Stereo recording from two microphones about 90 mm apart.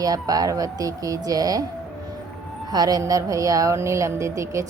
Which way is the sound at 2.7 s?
45° right (ahead or behind).